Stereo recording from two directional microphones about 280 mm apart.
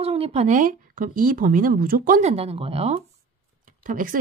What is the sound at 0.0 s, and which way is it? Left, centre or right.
Speech, right.